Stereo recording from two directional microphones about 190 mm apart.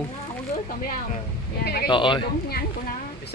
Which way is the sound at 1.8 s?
25° left (ahead or behind).